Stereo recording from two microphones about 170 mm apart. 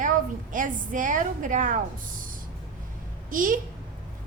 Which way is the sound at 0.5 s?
50° right (ahead or behind).